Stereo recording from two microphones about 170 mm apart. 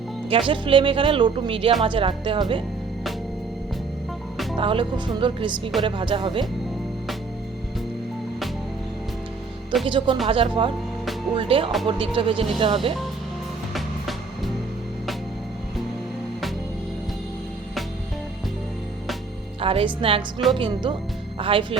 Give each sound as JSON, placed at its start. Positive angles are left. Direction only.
{"t": 0.3, "sound": "speech", "side_deg": -30}
{"t": 4.5, "sound": "speech", "side_deg": -30}
{"t": 9.8, "sound": "speech", "side_deg": -30}
{"t": 13.7, "sound": "music", "side_deg": 0}
{"t": 19.6, "sound": "speech", "side_deg": -30}